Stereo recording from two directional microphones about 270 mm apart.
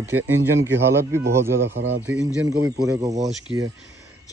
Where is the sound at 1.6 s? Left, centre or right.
Right.